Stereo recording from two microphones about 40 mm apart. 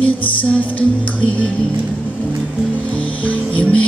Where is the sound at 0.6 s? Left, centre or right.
Left.